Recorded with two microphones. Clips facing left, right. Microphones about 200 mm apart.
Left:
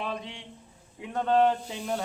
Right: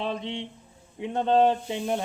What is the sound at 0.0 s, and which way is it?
Speech, 25° right (ahead or behind).